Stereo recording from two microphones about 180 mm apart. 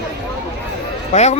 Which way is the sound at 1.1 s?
35° left (ahead or behind).